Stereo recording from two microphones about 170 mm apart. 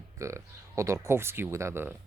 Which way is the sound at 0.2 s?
15° right (ahead or behind).